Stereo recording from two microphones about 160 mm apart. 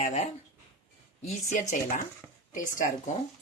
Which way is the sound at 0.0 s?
45° left (ahead or behind).